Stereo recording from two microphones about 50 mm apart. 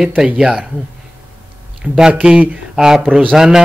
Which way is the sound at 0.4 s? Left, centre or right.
Centre.